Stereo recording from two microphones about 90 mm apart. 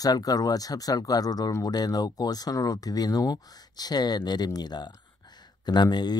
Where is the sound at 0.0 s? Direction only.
45° left (ahead or behind).